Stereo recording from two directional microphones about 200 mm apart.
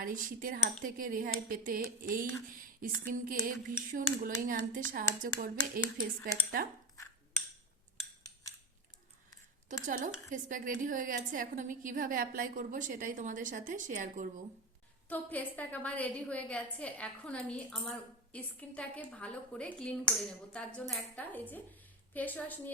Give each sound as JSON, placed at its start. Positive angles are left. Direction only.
{"t": 0.0, "sound": "speech", "side_deg": -45}
{"t": 9.8, "sound": "a woman's voice", "side_deg": -40}
{"t": 15.1, "sound": "a woman's voice", "side_deg": 10}